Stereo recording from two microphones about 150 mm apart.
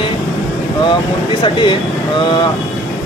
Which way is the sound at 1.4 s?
35° left (ahead or behind).